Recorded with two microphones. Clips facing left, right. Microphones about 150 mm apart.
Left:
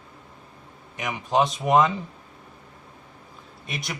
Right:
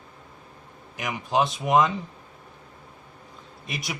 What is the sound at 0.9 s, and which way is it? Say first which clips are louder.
Speech: left 2 dB; centre (ahead or behind).